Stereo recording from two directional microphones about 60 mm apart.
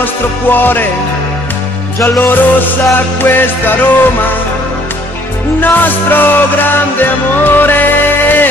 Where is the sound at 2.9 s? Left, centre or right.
Left.